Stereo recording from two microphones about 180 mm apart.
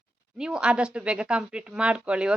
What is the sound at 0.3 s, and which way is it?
A woman's voice, 5° right (ahead or behind).